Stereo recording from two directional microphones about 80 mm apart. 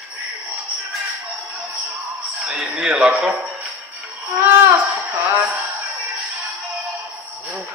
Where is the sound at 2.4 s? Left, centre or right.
Centre.